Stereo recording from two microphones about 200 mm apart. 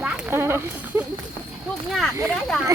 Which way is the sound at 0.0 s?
5° right (ahead or behind).